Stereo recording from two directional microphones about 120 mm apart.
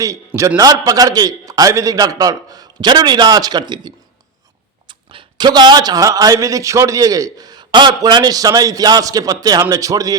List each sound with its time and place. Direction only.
0.0 s a man's voice: 25° right (ahead or behind)